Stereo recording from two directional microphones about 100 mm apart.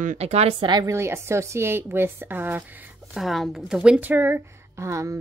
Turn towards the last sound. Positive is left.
turn(degrees=-30)  # may be behind; listen again after turning